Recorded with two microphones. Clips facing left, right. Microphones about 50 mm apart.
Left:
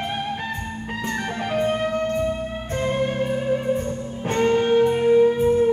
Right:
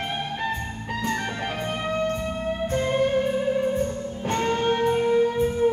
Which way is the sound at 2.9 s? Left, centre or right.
Centre.